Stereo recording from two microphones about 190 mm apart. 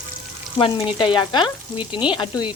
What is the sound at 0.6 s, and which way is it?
Frying, 30° left (ahead or behind).